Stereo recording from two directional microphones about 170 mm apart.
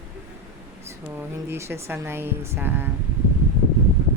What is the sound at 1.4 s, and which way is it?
Speech, 15° right (ahead or behind).